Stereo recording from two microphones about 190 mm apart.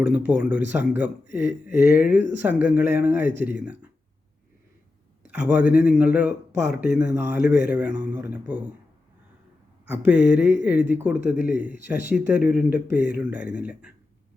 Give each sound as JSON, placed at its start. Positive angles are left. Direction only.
{"t": 0.3, "sound": "speech", "side_deg": -10}
{"t": 1.3, "sound": "speech", "side_deg": 45}
{"t": 2.0, "sound": "speech", "side_deg": -10}
{"t": 5.3, "sound": "speech", "side_deg": -10}
{"t": 9.8, "sound": "speech", "side_deg": -10}